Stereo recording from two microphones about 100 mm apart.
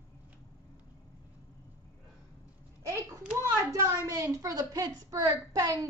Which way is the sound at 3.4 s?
30° right (ahead or behind).